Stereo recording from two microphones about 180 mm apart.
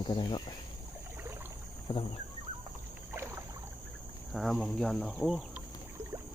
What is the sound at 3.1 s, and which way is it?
Rowboat, 15° right (ahead or behind).